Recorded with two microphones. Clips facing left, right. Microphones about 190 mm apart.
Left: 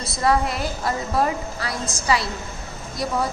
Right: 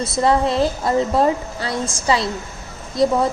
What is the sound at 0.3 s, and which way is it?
A woman's voice, 25° right (ahead or behind).